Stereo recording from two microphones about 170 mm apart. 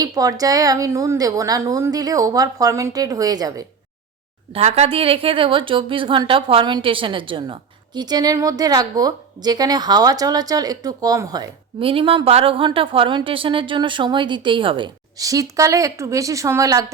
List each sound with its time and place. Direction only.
0.0 s a woman's voice: 20° right (ahead or behind)
4.5 s a woman's voice: 35° right (ahead or behind); by 16.8 s 20° right (ahead or behind)